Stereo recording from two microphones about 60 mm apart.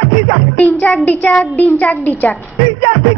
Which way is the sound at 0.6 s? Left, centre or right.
Left.